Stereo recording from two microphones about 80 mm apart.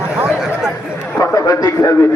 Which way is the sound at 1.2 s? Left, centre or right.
Left.